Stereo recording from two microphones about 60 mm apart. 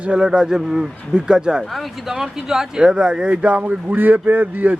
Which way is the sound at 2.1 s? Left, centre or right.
Centre.